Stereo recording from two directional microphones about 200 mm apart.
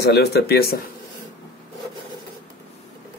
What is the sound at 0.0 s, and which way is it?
Speech, 55° left (ahead or behind).